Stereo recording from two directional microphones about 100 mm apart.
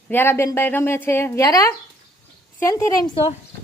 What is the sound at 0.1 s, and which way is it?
A child's voice, 20° left (ahead or behind).